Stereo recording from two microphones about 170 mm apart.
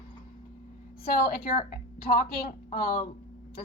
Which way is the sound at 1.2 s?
65° left (ahead or behind).